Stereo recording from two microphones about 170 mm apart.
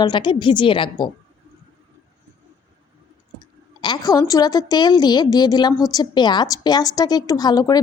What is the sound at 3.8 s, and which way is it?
A woman's voice, 25° left (ahead or behind).